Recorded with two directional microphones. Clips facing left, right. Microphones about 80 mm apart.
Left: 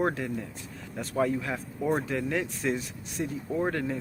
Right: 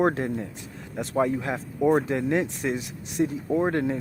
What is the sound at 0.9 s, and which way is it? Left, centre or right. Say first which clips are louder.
Speech: right 3 dB; right.